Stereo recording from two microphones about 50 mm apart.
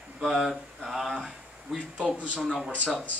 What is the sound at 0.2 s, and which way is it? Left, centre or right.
Mantra, centre.